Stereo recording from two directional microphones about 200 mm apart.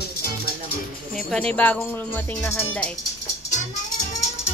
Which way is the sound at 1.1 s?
5° left (ahead or behind).